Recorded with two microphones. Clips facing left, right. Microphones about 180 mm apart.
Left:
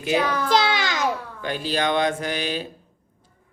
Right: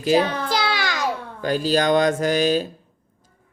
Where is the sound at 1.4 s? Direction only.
40° right (ahead or behind).